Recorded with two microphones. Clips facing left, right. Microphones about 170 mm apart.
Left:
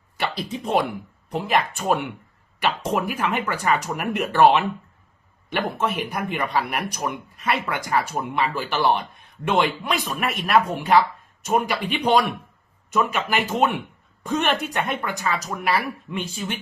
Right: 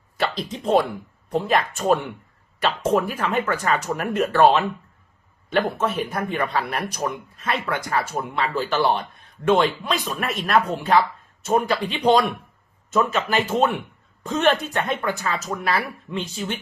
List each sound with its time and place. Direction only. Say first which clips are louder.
0.2 s speech: right 2 dB; 10° left (ahead or behind)
5.6 s speech: right 1 dB; 15° left (ahead or behind)